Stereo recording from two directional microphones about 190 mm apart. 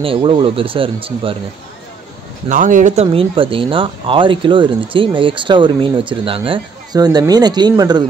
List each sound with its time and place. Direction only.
0.0 s speech: 30° right (ahead or behind)
2.5 s speech: 45° right (ahead or behind); by 8.0 s 20° right (ahead or behind)